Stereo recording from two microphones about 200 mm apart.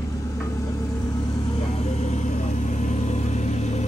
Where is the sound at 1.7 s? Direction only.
30° left (ahead or behind).